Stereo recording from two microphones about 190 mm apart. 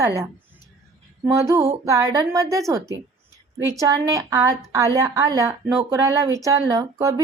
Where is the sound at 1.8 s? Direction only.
15° right (ahead or behind).